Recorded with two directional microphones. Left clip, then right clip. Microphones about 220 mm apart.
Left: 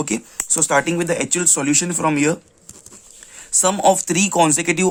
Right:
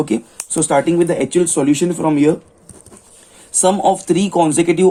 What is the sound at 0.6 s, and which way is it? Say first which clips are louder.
Speech: right 3 dB; 90° left.